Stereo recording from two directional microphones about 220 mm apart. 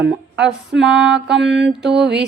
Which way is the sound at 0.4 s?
5° right (ahead or behind).